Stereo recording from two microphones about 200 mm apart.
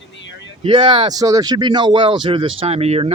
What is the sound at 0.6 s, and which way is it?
Speech, 25° right (ahead or behind).